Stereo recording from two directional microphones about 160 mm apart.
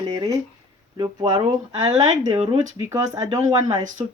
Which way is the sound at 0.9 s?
30° right (ahead or behind).